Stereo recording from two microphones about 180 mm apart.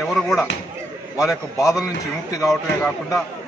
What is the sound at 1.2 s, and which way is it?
Speech, centre (ahead or behind).